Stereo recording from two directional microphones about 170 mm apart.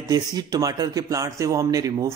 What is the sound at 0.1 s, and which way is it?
Speech, 25° right (ahead or behind).